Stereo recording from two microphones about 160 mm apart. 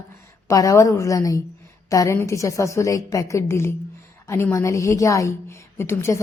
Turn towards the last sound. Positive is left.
turn(degrees=15)  # may be behind; listen again after turning